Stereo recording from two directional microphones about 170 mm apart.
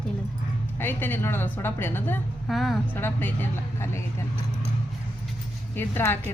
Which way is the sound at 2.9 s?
10° left (ahead or behind).